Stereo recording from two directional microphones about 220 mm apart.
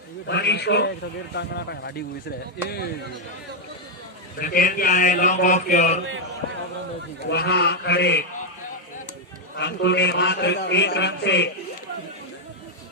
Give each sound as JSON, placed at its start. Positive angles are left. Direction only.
{"t": 0.3, "sound": "a man's voice", "side_deg": 50}
{"t": 4.4, "sound": "a man's voice", "side_deg": 40}
{"t": 7.3, "sound": "a man's voice", "side_deg": 50}
{"t": 9.6, "sound": "a man's voice", "side_deg": 50}